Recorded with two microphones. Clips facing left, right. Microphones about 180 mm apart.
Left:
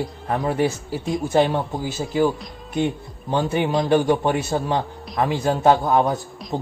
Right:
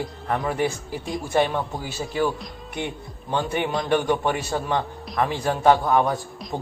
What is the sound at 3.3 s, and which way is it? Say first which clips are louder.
A man's voice: left 4 dB; 20° left (ahead or behind).